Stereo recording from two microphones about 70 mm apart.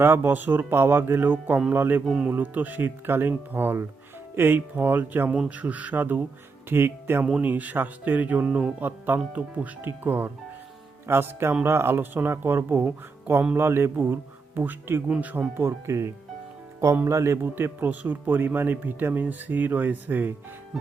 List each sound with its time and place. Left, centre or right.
0.0 s speech: right
2.0 s speech: centre
2.3 s speech: right
15.9 s speech: right